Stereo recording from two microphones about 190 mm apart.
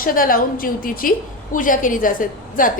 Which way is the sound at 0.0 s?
45° left (ahead or behind).